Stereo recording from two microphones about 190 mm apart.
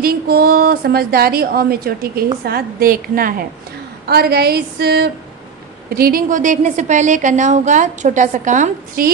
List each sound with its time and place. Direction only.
0.0 s a woman's voice: 55° right (ahead or behind)